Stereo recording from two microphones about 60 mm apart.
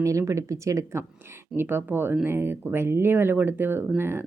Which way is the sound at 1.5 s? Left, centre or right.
Right.